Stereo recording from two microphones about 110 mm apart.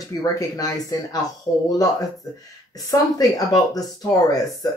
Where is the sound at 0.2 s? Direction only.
35° left (ahead or behind).